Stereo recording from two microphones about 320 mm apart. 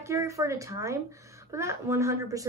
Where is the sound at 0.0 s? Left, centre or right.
Centre.